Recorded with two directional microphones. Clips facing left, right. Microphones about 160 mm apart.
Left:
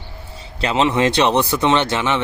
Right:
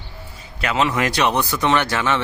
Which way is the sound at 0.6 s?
25° left (ahead or behind).